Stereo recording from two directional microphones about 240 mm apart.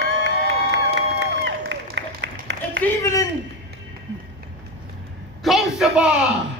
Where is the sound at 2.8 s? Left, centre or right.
Centre.